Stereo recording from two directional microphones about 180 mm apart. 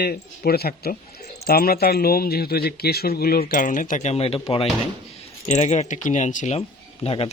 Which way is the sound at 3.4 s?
45° left (ahead or behind).